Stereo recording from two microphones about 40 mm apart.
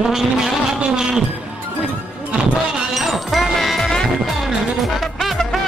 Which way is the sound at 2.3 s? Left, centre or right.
Centre.